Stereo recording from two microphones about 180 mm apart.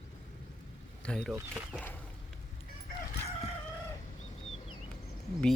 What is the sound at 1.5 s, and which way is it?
Speech, 5° right (ahead or behind).